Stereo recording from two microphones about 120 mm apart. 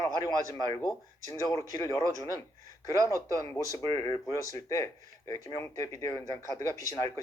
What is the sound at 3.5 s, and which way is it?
Speech, 30° left (ahead or behind).